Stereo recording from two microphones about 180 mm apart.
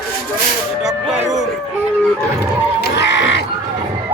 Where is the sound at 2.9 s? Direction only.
75° left (ahead or behind).